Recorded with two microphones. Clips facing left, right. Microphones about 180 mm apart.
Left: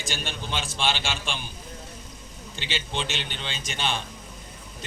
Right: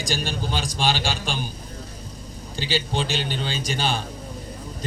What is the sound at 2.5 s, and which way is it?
A man's voice, 35° right (ahead or behind).